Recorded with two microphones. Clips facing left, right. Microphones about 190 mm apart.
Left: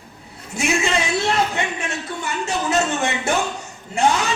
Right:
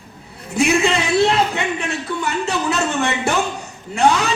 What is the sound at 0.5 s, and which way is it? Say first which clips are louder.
A woman's voice: right 4 dB; 60° right (ahead or behind).